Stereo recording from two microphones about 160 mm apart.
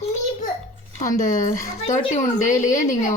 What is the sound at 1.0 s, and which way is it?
Speech, 55° left (ahead or behind).